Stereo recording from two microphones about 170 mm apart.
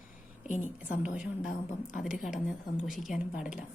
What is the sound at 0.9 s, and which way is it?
Speech, 5° right (ahead or behind).